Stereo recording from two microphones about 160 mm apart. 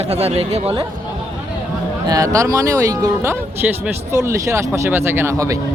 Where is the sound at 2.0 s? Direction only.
20° right (ahead or behind).